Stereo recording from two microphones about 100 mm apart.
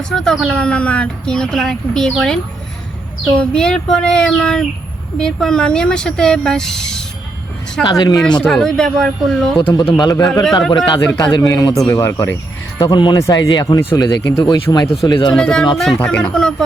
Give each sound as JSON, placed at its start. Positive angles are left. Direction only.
{"t": 0.1, "sound": "speech", "side_deg": 5}
{"t": 7.9, "sound": "speech", "side_deg": 40}
{"t": 8.4, "sound": "speech", "side_deg": 5}
{"t": 9.6, "sound": "speech", "side_deg": 55}
{"t": 12.8, "sound": "speech", "side_deg": 45}
{"t": 13.1, "sound": "speech", "side_deg": 30}
{"t": 15.0, "sound": "speech", "side_deg": 50}
{"t": 15.4, "sound": "speech", "side_deg": 10}